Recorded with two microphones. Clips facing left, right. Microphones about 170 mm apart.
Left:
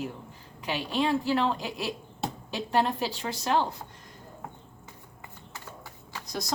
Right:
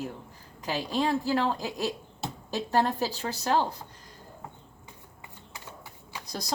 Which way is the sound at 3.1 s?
40° right (ahead or behind).